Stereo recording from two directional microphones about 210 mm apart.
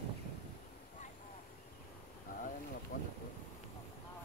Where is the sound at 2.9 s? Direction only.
40° left (ahead or behind).